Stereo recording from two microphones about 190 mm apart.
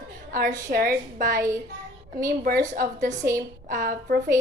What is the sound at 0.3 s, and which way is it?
A woman's voice, 45° right (ahead or behind).